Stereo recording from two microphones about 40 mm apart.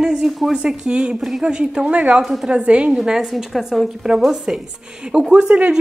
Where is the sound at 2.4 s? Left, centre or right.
Right.